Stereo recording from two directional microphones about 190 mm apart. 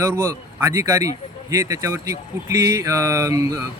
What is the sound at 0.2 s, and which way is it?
Speech, 15° right (ahead or behind).